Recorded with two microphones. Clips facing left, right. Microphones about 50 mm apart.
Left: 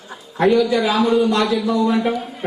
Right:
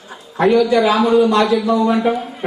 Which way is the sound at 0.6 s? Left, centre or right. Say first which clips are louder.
Right 3 dB; centre.